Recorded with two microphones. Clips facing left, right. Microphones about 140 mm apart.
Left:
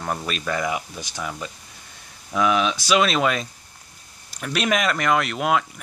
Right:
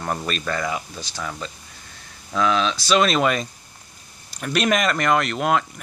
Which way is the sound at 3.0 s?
Centre (ahead or behind).